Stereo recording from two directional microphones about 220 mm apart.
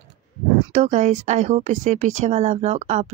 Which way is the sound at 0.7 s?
30° right (ahead or behind).